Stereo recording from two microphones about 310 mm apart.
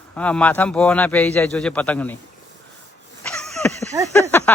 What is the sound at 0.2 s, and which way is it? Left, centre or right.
A man's voice, centre.